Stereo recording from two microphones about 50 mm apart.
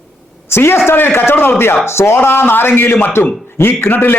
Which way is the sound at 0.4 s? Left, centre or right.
Left.